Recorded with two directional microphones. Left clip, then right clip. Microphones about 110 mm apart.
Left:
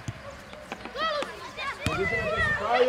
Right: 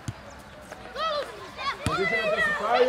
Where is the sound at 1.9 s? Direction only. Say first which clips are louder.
Right 3 dB; 35° right (ahead or behind).